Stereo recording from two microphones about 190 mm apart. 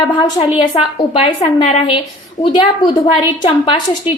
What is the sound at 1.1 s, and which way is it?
A woman's voice, 30° left (ahead or behind).